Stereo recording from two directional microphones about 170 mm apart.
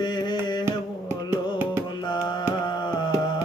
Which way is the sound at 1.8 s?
25° left (ahead or behind).